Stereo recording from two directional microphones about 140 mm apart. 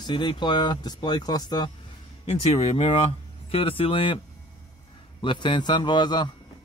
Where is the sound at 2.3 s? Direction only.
45° left (ahead or behind).